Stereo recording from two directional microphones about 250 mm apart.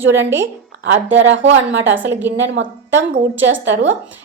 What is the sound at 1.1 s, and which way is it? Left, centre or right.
Speech, right.